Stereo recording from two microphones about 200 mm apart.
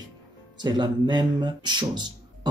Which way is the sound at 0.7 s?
20° right (ahead or behind).